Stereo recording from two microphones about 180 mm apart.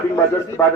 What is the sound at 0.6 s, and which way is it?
Speech, 15° left (ahead or behind).